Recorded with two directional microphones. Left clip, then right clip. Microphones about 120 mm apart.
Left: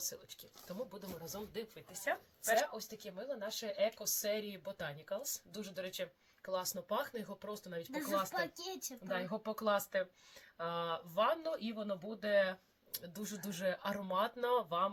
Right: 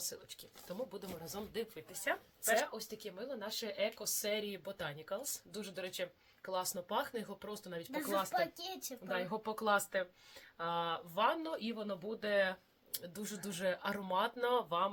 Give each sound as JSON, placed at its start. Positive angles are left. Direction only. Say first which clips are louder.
{"t": 0.0, "sound": "a woman's voice", "louder": "even", "side_deg": -45}
{"t": 7.9, "sound": "speech", "louder": "right 2 dB", "side_deg": -25}
{"t": 9.0, "sound": "speech", "louder": "right 1 dB", "side_deg": -40}